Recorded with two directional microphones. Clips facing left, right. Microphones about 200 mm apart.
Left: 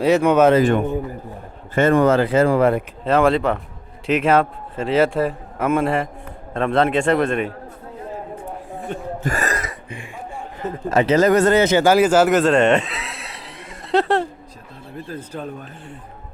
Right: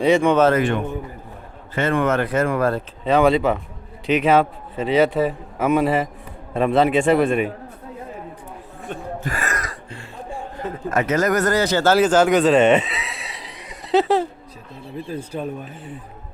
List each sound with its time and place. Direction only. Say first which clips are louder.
0.0 s speech: left 1 dB; 5° left (ahead or behind)
0.5 s speech: left 4 dB; 35° left (ahead or behind)
3.0 s a man's voice: right 1 dB; centre (ahead or behind)
9.2 s speech: left 5 dB; 40° left (ahead or behind)
9.6 s throat clearing: left 2 dB; 20° left (ahead or behind)
10.6 s speech: left 4 dB; 30° left (ahead or behind); by 14.3 s centre (ahead or behind)
14.9 s speech: right 3 dB; 10° right (ahead or behind)